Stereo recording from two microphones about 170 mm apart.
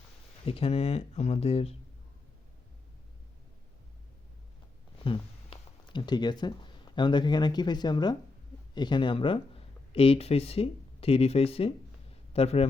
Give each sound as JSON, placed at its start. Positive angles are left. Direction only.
{"t": 0.4, "sound": "speech", "side_deg": 35}
{"t": 5.0, "sound": "speech", "side_deg": 30}